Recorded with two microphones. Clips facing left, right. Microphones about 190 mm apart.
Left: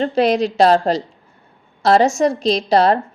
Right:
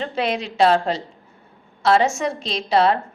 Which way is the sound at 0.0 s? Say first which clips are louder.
Left 8 dB; 40° left (ahead or behind).